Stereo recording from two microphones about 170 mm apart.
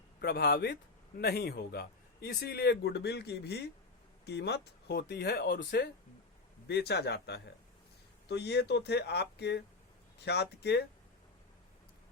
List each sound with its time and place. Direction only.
0.2 s a man's voice: 70° left (ahead or behind)